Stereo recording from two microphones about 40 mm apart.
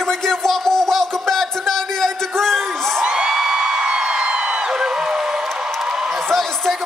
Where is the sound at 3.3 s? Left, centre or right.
Centre.